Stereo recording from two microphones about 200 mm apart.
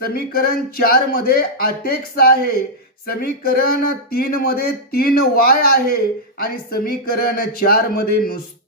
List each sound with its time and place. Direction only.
0.0 s speech: 50° left (ahead or behind)